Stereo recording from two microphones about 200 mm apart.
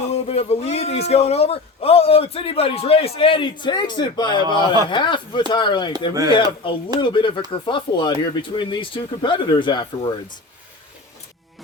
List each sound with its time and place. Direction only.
0.1 s a man's voice: 30° left (ahead or behind)
4.4 s speech: 20° right (ahead or behind)
4.9 s a man's voice: 25° left (ahead or behind)